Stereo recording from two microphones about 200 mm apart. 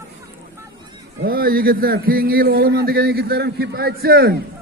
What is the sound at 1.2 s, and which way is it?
A man's voice, 50° right (ahead or behind).